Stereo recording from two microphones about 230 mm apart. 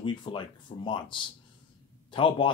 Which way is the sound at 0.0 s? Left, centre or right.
Left.